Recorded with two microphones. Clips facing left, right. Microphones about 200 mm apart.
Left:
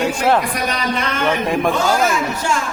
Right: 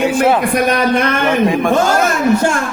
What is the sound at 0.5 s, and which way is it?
Speech, 55° right (ahead or behind).